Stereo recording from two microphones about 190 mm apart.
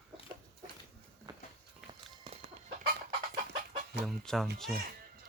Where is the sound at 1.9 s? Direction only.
30° right (ahead or behind).